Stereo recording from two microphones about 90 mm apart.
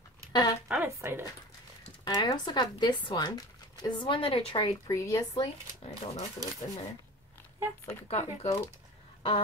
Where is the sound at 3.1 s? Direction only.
45° left (ahead or behind); by 4.6 s 90° left.